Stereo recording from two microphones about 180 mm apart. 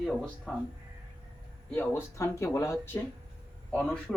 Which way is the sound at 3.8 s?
5° left (ahead or behind).